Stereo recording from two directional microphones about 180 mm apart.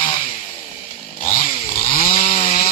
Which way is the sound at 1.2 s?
35° left (ahead or behind).